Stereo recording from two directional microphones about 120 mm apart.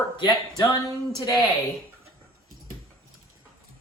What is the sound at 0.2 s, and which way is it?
Speech, 30° left (ahead or behind).